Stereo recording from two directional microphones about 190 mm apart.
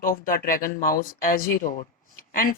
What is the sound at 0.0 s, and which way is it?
Speech, 45° left (ahead or behind).